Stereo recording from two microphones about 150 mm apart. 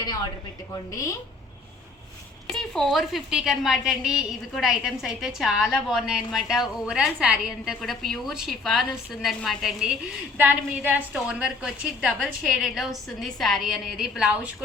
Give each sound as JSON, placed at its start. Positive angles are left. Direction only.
{"t": 0.7, "sound": "a woman's voice", "side_deg": 20}
{"t": 2.5, "sound": "a woman's voice", "side_deg": 5}